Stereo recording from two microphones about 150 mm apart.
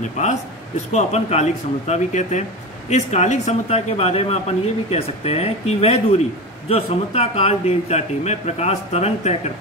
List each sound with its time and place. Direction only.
0.2 s speech: 50° left (ahead or behind)